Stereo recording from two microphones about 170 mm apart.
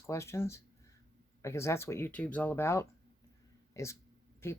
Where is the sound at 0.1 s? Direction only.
15° left (ahead or behind).